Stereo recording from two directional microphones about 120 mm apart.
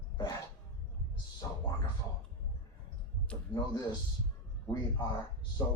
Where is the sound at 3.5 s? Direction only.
40° left (ahead or behind).